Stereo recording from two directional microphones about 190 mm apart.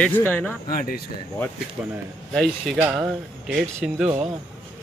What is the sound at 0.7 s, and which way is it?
Speech, 50° left (ahead or behind).